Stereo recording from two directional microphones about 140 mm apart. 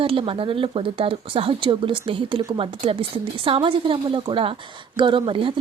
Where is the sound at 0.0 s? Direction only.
40° right (ahead or behind).